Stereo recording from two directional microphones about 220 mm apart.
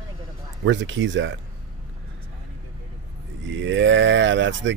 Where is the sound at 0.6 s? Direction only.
55° right (ahead or behind).